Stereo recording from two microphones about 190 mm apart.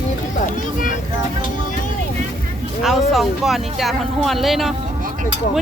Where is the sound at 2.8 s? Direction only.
Centre (ahead or behind).